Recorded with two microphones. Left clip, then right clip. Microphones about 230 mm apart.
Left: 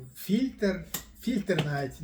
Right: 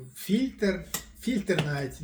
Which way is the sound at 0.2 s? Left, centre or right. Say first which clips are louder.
Right 1 dB; centre.